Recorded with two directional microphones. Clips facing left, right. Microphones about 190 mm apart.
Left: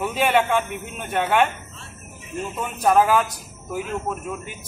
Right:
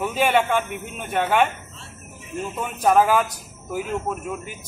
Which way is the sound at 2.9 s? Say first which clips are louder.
Even; 5° right (ahead or behind).